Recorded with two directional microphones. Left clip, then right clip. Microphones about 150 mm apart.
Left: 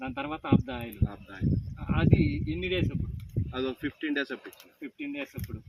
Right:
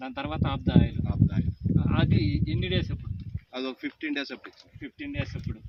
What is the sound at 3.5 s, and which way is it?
Speech, 40° right (ahead or behind).